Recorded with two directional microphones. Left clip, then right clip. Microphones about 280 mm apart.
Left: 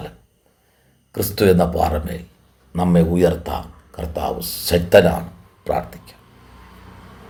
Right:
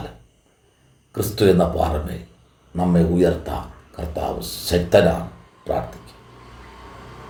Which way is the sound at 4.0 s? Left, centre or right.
Left.